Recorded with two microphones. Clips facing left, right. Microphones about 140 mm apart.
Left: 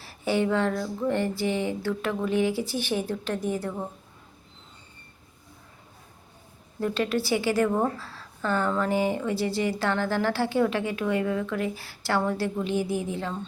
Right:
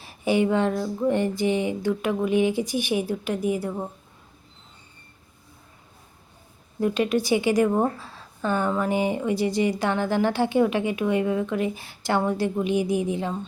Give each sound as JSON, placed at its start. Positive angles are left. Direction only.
{"t": 0.0, "sound": "a woman's voice", "side_deg": -15}
{"t": 6.7, "sound": "a woman's voice", "side_deg": -15}